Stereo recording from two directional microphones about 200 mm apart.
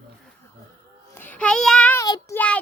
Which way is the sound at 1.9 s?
15° left (ahead or behind).